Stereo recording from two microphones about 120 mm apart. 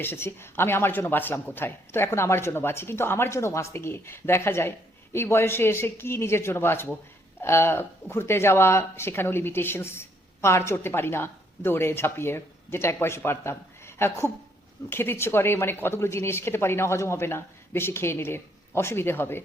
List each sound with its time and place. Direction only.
0.0 s speech: 20° left (ahead or behind)